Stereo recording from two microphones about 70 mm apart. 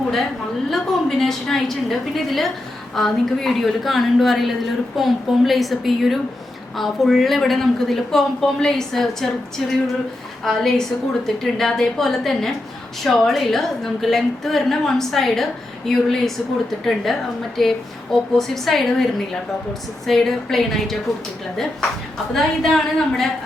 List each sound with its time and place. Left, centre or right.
0.7 s a woman's voice: centre
20.1 s a woman's voice: centre
22.3 s a woman's voice: centre